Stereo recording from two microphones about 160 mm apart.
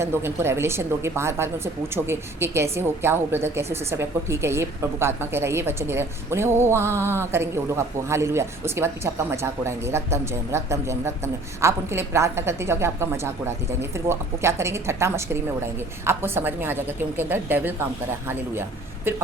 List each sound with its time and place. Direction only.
0.0 s speech: 15° right (ahead or behind)
19.1 s speech: 15° right (ahead or behind)